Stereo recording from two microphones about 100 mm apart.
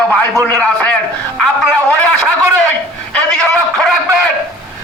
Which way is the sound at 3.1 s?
10° left (ahead or behind).